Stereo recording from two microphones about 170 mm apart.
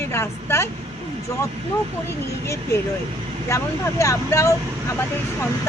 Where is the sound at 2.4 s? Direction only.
15° left (ahead or behind).